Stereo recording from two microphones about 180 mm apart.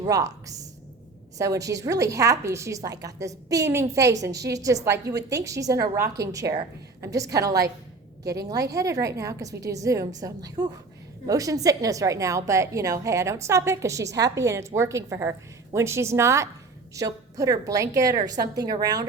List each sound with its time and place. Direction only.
0.0 s a woman's voice: 20° right (ahead or behind)